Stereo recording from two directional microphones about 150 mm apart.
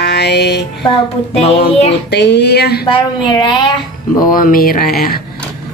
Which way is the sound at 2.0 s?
90° left.